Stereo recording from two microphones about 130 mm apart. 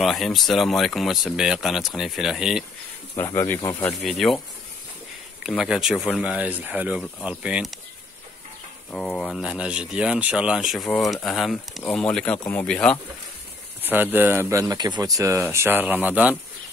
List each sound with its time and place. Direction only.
0.0 s speech: centre (ahead or behind)
3.2 s speech: 20° left (ahead or behind)
4.0 s speech: centre (ahead or behind)
5.6 s speech: 5° right (ahead or behind)
8.9 s speech: 5° left (ahead or behind)
13.8 s speech: 15° right (ahead or behind)